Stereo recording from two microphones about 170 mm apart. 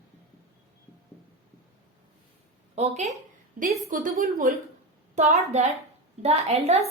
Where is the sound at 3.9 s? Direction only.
55° right (ahead or behind).